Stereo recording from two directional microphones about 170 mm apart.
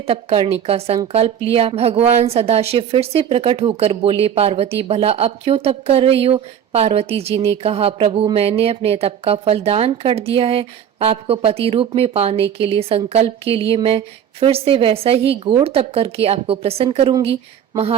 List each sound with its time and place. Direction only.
0.1 s a woman's voice: 35° right (ahead or behind)